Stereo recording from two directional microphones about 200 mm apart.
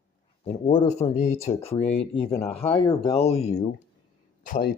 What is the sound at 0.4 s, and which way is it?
Speech, 35° left (ahead or behind).